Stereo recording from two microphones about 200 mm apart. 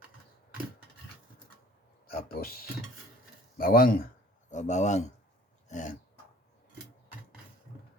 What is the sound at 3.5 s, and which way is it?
Speech, 45° left (ahead or behind).